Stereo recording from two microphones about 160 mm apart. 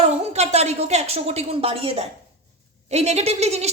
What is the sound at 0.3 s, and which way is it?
A woman's voice, 45° right (ahead or behind).